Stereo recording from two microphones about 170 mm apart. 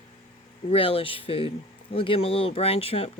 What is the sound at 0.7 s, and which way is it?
Speech, 35° left (ahead or behind).